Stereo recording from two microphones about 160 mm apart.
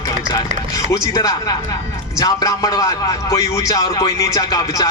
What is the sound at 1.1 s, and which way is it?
A man's voice, 25° left (ahead or behind).